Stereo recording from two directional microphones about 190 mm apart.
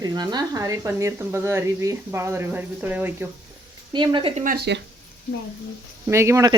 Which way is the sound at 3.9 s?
25° right (ahead or behind).